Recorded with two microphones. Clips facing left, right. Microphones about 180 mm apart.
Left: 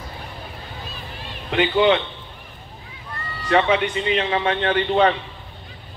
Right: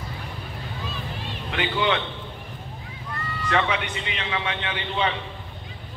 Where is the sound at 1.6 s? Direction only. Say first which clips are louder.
Left 7 dB; 25° left (ahead or behind).